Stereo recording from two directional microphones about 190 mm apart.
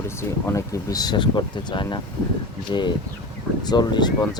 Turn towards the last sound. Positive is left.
turn(degrees=20)  # may be behind; listen again after turning